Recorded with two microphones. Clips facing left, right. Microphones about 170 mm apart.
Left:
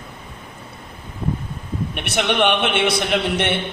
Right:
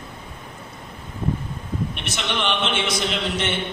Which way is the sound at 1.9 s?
60° left (ahead or behind).